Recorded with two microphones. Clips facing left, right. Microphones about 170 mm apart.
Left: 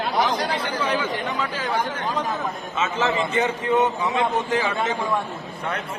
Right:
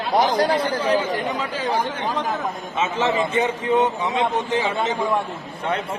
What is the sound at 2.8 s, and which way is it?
A man's voice, 30° right (ahead or behind).